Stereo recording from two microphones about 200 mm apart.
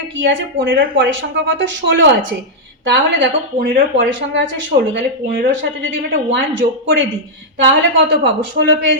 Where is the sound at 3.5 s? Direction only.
45° right (ahead or behind).